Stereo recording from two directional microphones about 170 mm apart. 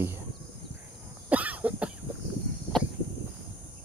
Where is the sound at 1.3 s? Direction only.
10° right (ahead or behind).